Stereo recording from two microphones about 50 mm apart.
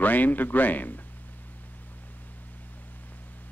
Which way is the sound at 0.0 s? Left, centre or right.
Left.